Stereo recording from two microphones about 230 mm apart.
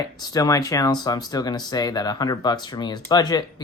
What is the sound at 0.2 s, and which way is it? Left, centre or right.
Speech, centre.